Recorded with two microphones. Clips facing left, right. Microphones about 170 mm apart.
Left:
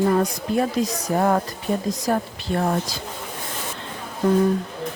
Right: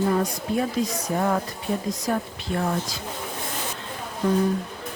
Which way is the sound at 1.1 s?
45° left (ahead or behind).